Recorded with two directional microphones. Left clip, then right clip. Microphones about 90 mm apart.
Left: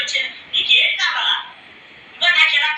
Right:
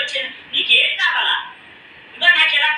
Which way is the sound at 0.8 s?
25° right (ahead or behind).